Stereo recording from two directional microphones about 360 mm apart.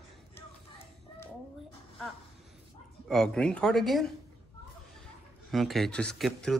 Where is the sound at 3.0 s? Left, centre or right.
Centre.